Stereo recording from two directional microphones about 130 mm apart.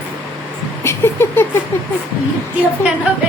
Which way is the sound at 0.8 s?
20° left (ahead or behind).